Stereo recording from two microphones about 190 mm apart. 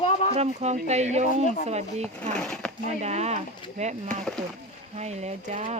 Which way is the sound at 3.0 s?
35° right (ahead or behind).